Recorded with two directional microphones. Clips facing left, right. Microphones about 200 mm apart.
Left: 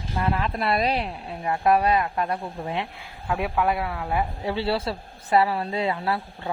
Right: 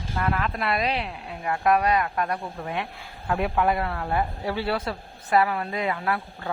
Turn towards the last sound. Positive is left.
turn(degrees=30)  # may be behind; listen again after turning